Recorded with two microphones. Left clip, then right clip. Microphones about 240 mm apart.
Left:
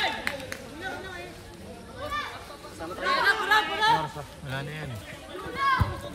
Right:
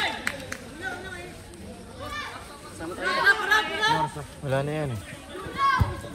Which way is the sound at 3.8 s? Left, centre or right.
Centre.